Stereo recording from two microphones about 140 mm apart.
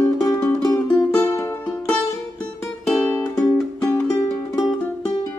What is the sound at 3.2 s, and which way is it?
Music, 25° left (ahead or behind).